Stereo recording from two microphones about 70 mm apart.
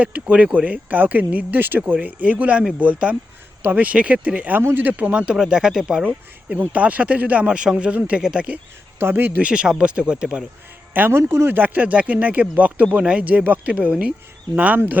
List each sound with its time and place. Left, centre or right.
0.0 s speech: centre
5.2 s speech: centre
6.1 s speech: right
9.0 s speech: right
9.5 s speech: centre
10.9 s speech: right
11.2 s speech: right